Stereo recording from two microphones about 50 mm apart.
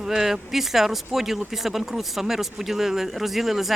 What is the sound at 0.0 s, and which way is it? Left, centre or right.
Speech, centre.